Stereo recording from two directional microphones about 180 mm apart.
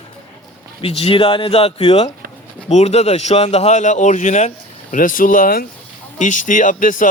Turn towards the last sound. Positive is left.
turn(degrees=45)  # may be behind; listen again after turning